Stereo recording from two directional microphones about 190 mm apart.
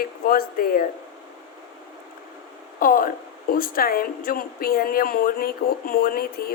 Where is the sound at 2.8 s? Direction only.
50° left (ahead or behind).